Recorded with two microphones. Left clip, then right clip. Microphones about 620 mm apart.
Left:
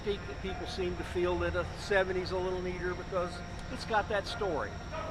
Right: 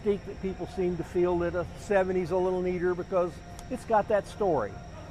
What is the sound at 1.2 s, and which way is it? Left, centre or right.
Speech, right.